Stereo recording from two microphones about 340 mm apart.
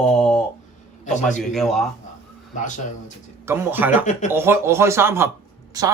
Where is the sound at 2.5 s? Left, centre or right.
Left.